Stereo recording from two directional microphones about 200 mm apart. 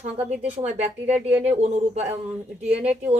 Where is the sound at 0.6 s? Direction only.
35° right (ahead or behind).